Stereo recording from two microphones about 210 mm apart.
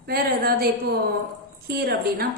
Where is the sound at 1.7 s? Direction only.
50° right (ahead or behind).